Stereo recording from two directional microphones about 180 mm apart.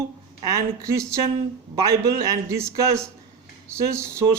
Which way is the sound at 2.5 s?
15° right (ahead or behind).